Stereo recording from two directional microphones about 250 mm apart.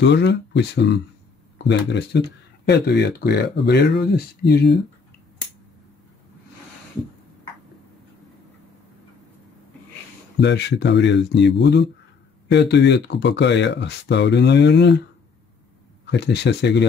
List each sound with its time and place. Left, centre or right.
0.0 s speech: left
10.4 s speech: left
16.1 s speech: left